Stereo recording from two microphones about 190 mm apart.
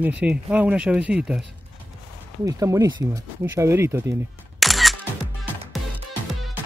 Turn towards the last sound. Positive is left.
turn(degrees=0)  # may be behind; listen again after turning